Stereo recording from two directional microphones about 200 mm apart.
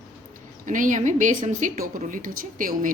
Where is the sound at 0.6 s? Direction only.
40° right (ahead or behind).